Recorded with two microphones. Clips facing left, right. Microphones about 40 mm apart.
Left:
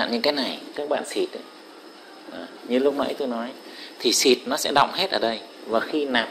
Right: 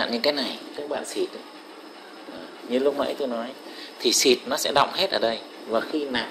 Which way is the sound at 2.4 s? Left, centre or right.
Centre.